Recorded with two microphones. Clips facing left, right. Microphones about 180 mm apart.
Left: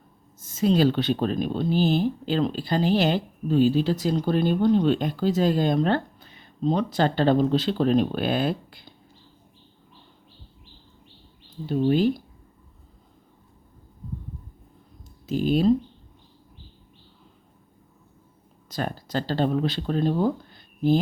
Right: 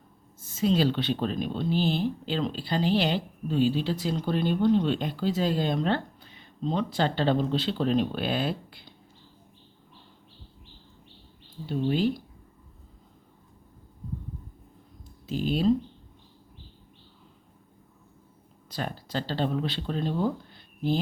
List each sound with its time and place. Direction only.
0.3 s speech: 45° left (ahead or behind)
11.6 s speech: 45° left (ahead or behind)
15.3 s speech: 45° left (ahead or behind)
18.7 s speech: 45° left (ahead or behind)